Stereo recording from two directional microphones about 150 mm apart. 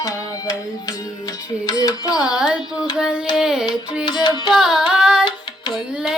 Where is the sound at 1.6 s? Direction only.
25° left (ahead or behind).